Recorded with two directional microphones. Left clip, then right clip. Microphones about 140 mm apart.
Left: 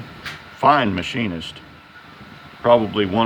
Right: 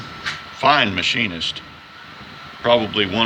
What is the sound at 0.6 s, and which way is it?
Speech, 50° left (ahead or behind).